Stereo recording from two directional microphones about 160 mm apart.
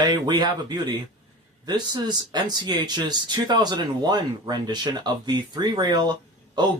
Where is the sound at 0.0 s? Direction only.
25° right (ahead or behind).